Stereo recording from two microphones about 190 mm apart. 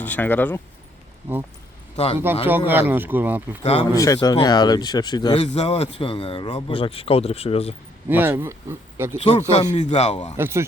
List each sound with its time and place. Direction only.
0.0 s speech: 10° left (ahead or behind)
2.1 s speech: 10° right (ahead or behind)
3.6 s speech: 35° left (ahead or behind)
3.9 s speech: 15° left (ahead or behind)
5.5 s speech: 35° left (ahead or behind)
8.1 s speech: 10° right (ahead or behind)
9.1 s speech: 35° left (ahead or behind)
10.3 s speech: 15° right (ahead or behind)